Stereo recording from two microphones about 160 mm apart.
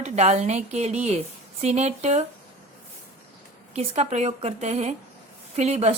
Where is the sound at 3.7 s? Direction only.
40° right (ahead or behind).